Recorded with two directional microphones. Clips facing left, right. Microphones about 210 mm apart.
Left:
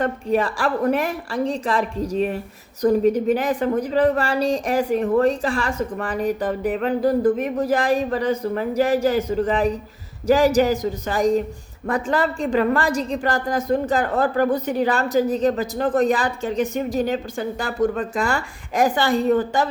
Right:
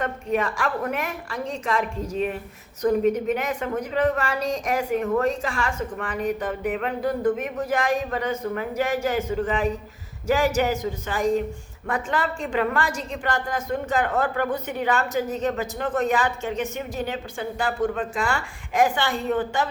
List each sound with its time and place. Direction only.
0.0 s a woman's voice: 35° left (ahead or behind)